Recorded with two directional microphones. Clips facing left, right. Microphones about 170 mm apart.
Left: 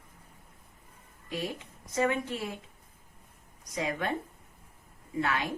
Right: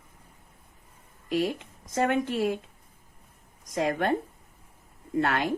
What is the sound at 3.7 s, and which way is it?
Speech, 55° right (ahead or behind).